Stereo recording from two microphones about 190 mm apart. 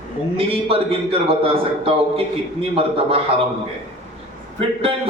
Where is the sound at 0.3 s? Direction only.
30° right (ahead or behind).